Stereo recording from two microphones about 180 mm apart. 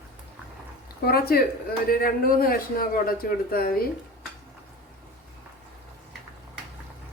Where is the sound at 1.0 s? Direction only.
60° left (ahead or behind).